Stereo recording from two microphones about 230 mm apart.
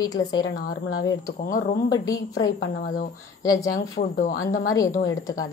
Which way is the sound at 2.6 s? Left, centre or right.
Left.